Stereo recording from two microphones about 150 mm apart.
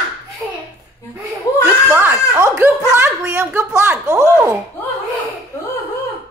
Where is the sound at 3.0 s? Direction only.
15° right (ahead or behind).